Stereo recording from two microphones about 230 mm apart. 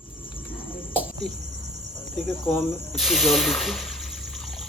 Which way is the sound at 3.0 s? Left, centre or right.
Centre.